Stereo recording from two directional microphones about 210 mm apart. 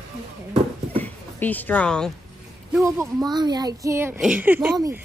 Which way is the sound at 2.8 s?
15° right (ahead or behind).